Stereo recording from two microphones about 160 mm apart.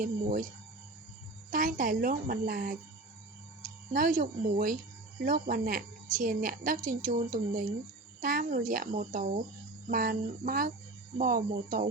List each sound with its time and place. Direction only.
0.0 s speech: 55° right (ahead or behind)
1.5 s speech: 60° right (ahead or behind)
3.9 s speech: 60° right (ahead or behind)